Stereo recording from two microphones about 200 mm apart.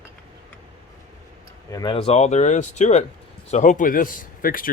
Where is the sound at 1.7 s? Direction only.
20° left (ahead or behind); by 4.7 s 45° left (ahead or behind).